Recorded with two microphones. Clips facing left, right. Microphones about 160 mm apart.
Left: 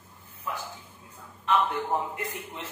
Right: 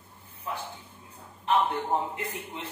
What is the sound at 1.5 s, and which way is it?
Speech, 30° right (ahead or behind).